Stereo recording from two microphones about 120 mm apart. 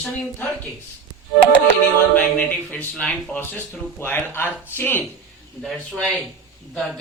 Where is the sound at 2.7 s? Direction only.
10° left (ahead or behind).